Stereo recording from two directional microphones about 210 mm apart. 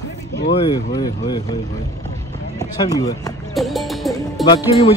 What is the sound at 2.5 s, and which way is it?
Speech, 15° left (ahead or behind).